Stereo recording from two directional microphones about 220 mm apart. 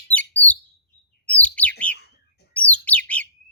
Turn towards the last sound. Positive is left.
turn(degrees=5)  # may be behind; listen again after turning